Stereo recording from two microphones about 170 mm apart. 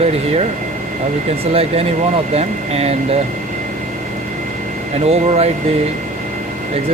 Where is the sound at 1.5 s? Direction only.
35° right (ahead or behind).